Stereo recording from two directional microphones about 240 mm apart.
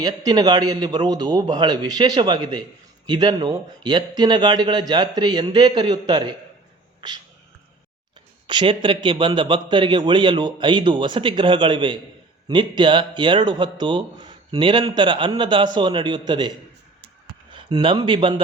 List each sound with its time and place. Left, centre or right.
0.0 s a man's voice: centre
8.4 s a man's voice: centre
17.5 s speech: centre